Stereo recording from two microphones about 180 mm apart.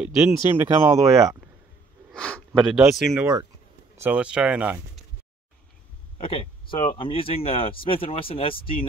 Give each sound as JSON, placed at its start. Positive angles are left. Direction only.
{"t": 0.0, "sound": "speech", "side_deg": -10}
{"t": 2.1, "sound": "speech", "side_deg": 5}
{"t": 6.1, "sound": "speech", "side_deg": 30}